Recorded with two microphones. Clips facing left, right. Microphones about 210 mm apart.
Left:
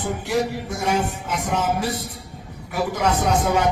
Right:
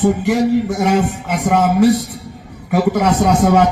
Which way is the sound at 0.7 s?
45° right (ahead or behind).